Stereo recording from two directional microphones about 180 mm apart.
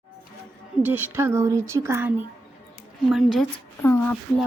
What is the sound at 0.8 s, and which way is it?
Speech, 10° right (ahead or behind).